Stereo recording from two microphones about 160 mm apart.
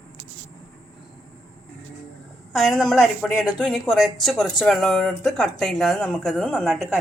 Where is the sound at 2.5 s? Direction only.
Centre (ahead or behind).